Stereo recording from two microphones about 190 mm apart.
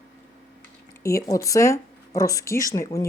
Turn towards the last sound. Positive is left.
turn(degrees=15)  # may be behind; listen again after turning